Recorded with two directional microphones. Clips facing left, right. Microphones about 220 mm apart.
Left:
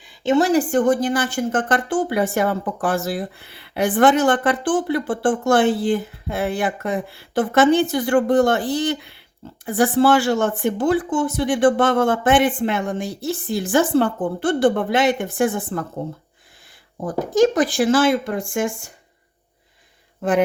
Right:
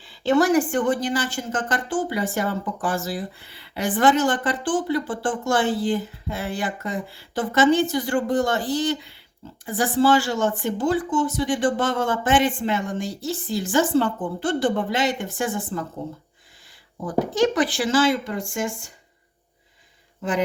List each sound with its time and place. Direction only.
0.0 s a sound: 20° left (ahead or behind)
0.7 s speech: 45° left (ahead or behind); by 15.9 s 60° left (ahead or behind)
17.3 s speech: 45° left (ahead or behind)